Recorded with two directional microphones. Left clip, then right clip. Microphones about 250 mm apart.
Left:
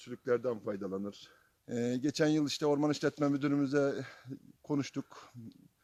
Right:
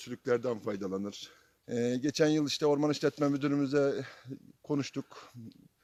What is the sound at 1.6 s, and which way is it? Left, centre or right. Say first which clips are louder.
A man's voice: right 3 dB; centre.